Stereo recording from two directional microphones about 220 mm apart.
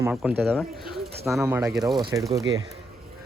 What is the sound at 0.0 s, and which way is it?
Speech, 5° right (ahead or behind).